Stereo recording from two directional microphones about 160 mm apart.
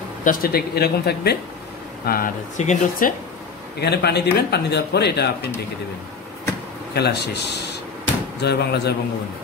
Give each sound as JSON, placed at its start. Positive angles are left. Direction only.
{"t": 0.2, "sound": "speech", "side_deg": 60}
{"t": 2.0, "sound": "speech", "side_deg": 60}
{"t": 3.8, "sound": "speech", "side_deg": 90}
{"t": 6.9, "sound": "speech", "side_deg": 90}